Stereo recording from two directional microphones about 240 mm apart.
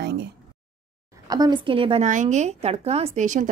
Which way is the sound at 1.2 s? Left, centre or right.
Centre.